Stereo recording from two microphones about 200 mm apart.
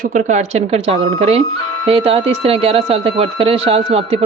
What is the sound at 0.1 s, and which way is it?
A woman's voice, 35° right (ahead or behind).